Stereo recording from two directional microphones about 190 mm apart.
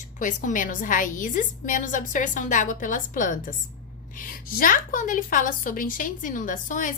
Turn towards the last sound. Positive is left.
turn(degrees=45)  # may be behind; listen again after turning